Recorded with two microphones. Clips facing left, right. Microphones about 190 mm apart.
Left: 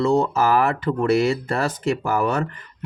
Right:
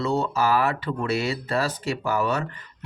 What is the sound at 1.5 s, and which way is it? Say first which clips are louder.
Speech: left 3 dB; 50° left (ahead or behind).